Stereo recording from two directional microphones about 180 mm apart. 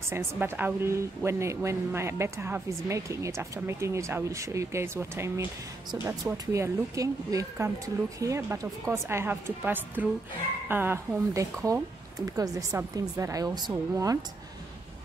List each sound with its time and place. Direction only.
0.1 s a woman's voice: 10° right (ahead or behind)